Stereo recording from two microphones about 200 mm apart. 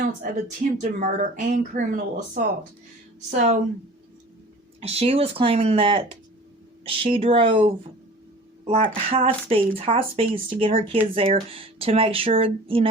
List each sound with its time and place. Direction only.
0.0 s speech: 45° right (ahead or behind)
4.8 s speech: 30° right (ahead or behind)